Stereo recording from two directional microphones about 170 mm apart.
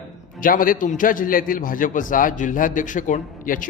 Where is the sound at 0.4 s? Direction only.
55° left (ahead or behind).